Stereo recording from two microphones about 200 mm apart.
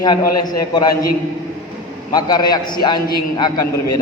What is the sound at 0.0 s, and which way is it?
Speech, 20° left (ahead or behind).